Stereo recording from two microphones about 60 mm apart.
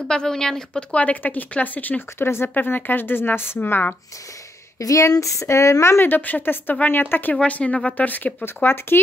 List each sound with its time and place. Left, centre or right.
0.1 s speech: centre
0.9 s speech: left
2.1 s speech: left
4.7 s speech: left
6.0 s speech: left
8.6 s speech: left